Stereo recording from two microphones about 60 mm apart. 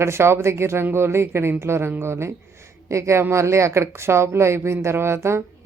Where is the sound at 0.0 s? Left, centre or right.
Right.